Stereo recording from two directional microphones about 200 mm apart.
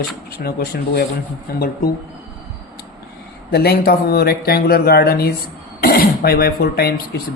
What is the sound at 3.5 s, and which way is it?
Speech, 50° left (ahead or behind).